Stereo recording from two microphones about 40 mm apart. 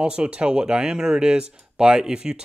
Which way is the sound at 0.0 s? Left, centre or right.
Right.